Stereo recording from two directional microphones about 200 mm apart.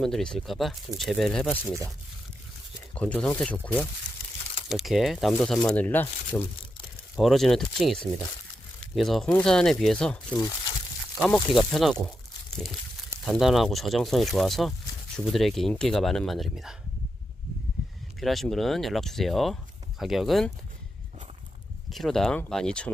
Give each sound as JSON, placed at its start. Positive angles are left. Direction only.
{"t": 0.0, "sound": "speech", "side_deg": 5}
{"t": 2.9, "sound": "speech", "side_deg": 5}
{"t": 11.2, "sound": "speech", "side_deg": 5}
{"t": 12.5, "sound": "a sound", "side_deg": 0}
{"t": 13.2, "sound": "speech", "side_deg": 0}
{"t": 18.2, "sound": "speech", "side_deg": 0}
{"t": 21.8, "sound": "speech", "side_deg": 0}